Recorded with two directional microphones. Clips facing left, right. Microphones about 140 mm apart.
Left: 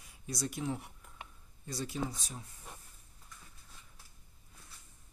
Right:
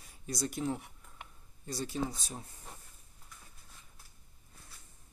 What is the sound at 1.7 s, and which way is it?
Speech, 35° right (ahead or behind).